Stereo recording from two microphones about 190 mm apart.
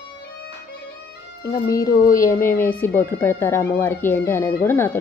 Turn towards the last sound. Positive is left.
turn(degrees=10)  # may be behind; listen again after turning